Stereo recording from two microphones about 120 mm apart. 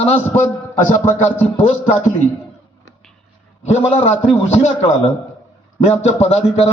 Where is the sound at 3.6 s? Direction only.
60° left (ahead or behind).